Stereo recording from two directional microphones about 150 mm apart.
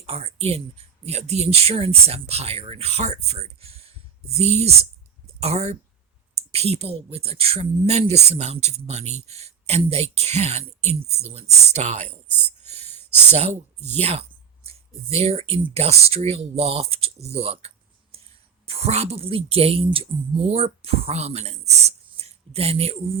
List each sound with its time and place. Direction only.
0.0 s speech: 40° right (ahead or behind)
5.4 s speech: 45° right (ahead or behind)
12.6 s a sound: 45° right (ahead or behind)
14.0 s speech: 40° right (ahead or behind)